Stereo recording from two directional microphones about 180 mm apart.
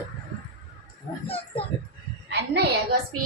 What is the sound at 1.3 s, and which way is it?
Speech, 30° left (ahead or behind).